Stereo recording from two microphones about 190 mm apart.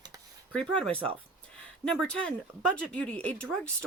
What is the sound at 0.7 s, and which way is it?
Speech, 5° left (ahead or behind).